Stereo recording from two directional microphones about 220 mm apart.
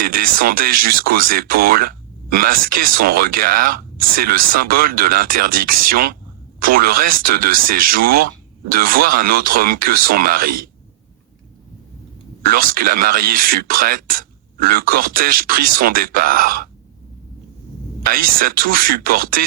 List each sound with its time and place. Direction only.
0.0 s speech: 40° right (ahead or behind)
12.4 s speech: 40° right (ahead or behind)
18.0 s speech: 40° right (ahead or behind)